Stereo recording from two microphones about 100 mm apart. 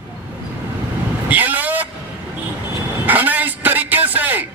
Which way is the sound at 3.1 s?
15° right (ahead or behind).